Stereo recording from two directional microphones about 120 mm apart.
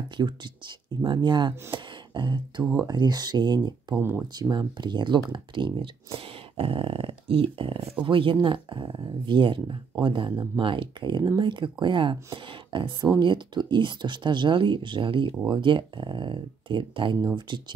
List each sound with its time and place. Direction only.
0.2 s speech: 35° right (ahead or behind)
4.0 s speech: 20° right (ahead or behind)
4.4 s speech: 35° right (ahead or behind)
10.6 s speech: 45° right (ahead or behind)